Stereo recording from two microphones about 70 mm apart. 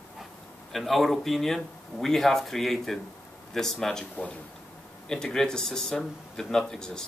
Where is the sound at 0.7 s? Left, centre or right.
Centre.